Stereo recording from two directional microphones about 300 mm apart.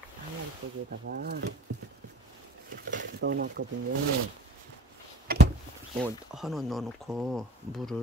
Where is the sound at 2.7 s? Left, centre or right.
Right.